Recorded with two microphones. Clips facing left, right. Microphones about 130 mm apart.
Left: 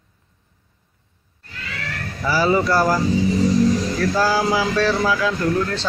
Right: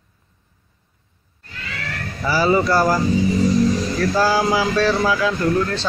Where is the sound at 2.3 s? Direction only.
5° right (ahead or behind).